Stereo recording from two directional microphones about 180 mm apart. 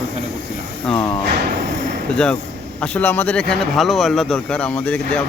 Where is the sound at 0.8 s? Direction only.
10° left (ahead or behind).